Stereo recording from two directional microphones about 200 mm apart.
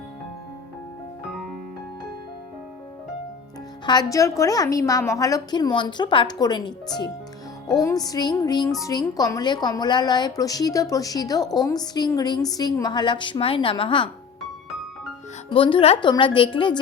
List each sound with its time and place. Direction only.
1.3 s music: centre (ahead or behind)
3.8 s speech: 20° left (ahead or behind)
15.4 s speech: 25° left (ahead or behind)